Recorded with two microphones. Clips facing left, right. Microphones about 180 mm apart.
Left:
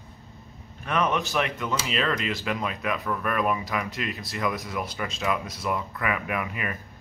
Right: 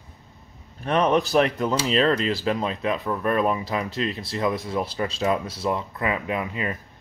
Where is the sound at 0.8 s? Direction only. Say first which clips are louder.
Right 5 dB; 35° right (ahead or behind).